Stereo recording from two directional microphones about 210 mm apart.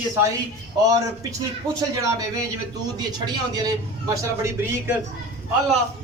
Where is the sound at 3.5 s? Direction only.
20° right (ahead or behind).